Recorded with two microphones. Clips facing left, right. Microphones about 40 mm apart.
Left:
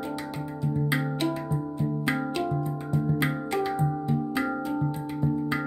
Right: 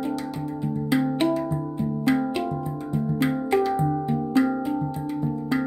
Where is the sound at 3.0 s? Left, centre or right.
Centre.